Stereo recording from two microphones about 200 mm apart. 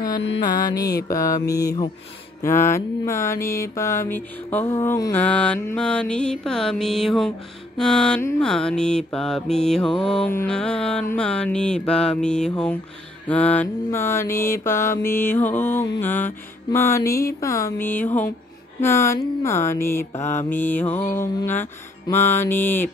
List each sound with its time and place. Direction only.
0.4 s mantra: 20° left (ahead or behind)